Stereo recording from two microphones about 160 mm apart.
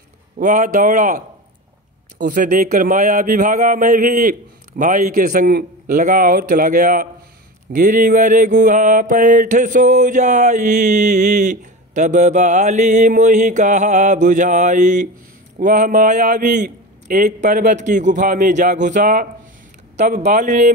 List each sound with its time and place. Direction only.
0.4 s mantra: 50° right (ahead or behind)
2.1 s a man's voice: 55° right (ahead or behind)
7.7 s mantra: 60° right (ahead or behind)